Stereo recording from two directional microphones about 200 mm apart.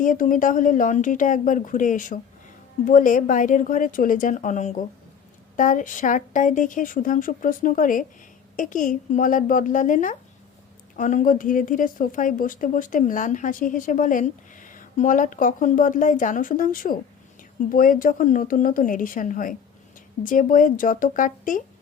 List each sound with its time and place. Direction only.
0.0 s a woman's voice: 40° left (ahead or behind)